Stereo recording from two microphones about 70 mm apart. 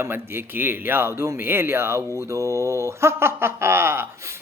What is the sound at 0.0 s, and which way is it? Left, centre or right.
Speech, right.